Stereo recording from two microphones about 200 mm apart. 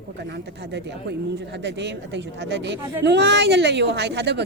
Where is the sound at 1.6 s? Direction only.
60° right (ahead or behind).